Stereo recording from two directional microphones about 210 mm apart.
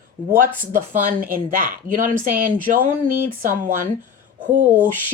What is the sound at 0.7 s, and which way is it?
A woman's voice, 40° right (ahead or behind).